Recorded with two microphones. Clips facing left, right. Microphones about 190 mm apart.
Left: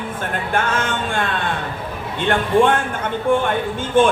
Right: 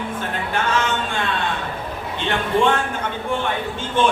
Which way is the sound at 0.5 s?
50° left (ahead or behind).